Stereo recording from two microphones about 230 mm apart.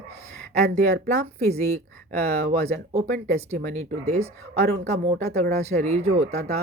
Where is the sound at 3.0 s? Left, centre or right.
Right.